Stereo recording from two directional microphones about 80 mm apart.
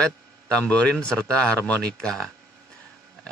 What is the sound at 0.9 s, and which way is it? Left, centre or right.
Speech, centre.